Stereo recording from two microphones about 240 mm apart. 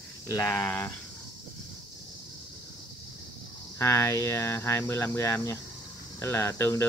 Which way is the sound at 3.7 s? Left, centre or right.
Centre.